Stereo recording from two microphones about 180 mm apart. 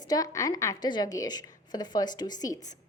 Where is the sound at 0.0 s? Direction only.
20° left (ahead or behind).